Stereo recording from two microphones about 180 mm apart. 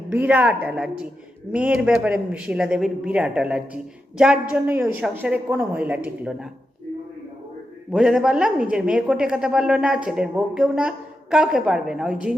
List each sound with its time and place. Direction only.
0.1 s a woman's voice: 10° right (ahead or behind)
7.9 s speech: centre (ahead or behind)